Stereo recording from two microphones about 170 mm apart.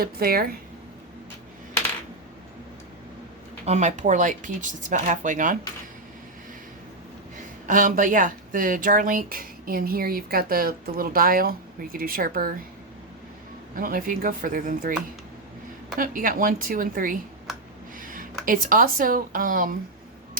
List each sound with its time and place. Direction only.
0.0 s speech: 60° right (ahead or behind)
3.7 s speech: 45° right (ahead or behind)
7.7 s speech: 50° right (ahead or behind)
13.7 s speech: 55° right (ahead or behind)
16.0 s speech: 55° right (ahead or behind)
18.0 s a sound: 55° right (ahead or behind)
18.4 s speech: 55° right (ahead or behind)